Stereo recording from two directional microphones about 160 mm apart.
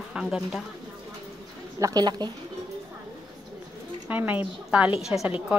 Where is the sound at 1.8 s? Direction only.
25° right (ahead or behind).